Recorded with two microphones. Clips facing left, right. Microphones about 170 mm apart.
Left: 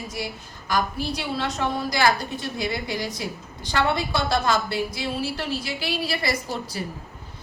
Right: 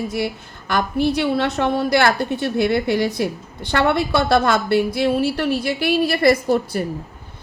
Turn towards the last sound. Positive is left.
turn(degrees=-55)  # may be behind; listen again after turning